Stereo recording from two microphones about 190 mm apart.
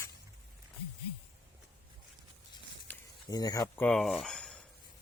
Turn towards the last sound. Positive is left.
turn(degrees=5)  # may be behind; listen again after turning